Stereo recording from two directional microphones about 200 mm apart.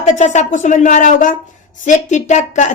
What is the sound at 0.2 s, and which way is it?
A woman's voice, 35° left (ahead or behind).